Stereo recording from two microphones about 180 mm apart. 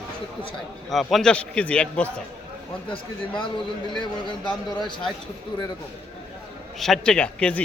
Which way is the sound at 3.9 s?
25° left (ahead or behind).